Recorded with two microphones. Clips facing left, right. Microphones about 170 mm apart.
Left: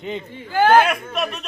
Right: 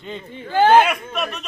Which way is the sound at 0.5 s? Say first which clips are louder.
Right 1 dB; 25° right (ahead or behind).